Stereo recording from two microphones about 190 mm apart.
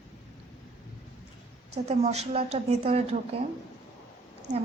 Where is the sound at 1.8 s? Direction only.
35° right (ahead or behind).